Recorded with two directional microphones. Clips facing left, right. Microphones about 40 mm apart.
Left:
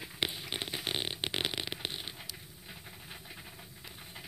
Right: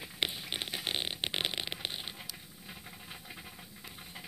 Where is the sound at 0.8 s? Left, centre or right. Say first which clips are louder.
Even; right.